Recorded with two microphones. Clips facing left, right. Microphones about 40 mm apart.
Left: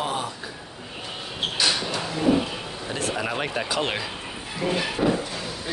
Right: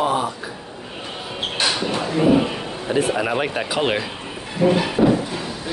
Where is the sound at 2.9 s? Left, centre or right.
Centre.